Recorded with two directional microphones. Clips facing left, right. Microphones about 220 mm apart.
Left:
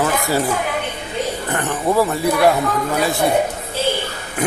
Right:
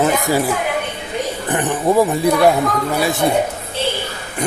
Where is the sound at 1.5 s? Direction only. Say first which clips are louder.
Right 3 dB; 15° right (ahead or behind).